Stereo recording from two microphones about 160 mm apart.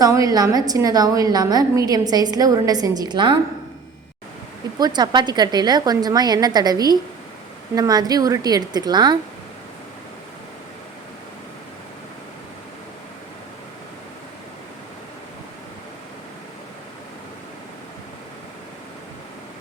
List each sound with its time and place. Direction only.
0.0 s a woman's voice: 20° right (ahead or behind)
4.8 s a woman's voice: 25° right (ahead or behind)